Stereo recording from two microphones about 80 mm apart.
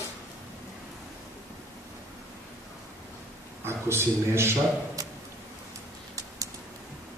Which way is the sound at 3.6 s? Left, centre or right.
Right.